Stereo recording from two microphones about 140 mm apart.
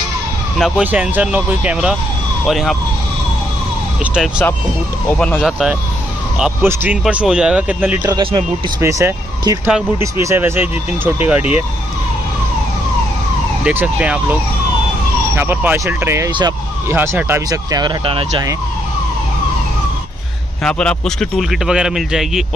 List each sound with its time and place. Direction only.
0.6 s speech: 5° right (ahead or behind)
4.0 s emergency vehicle: 5° right (ahead or behind)
5.1 s speech: 5° left (ahead or behind)
6.6 s speech: 15° right (ahead or behind)
8.1 s a man's voice: 35° right (ahead or behind)
8.8 s speech: 20° right (ahead or behind)
13.7 s speech: 10° right (ahead or behind); by 18.2 s 35° right (ahead or behind)
20.6 s speech: 5° left (ahead or behind)